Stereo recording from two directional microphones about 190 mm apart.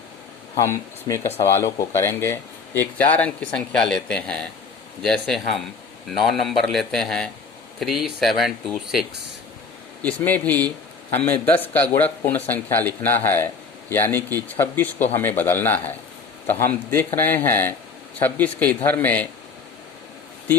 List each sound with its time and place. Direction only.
0.6 s speech: 15° left (ahead or behind)